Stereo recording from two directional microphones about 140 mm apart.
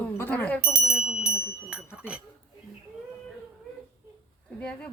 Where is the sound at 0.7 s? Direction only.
Centre (ahead or behind).